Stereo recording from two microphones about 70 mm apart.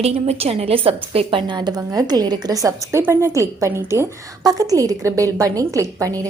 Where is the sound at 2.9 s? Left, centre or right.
Right.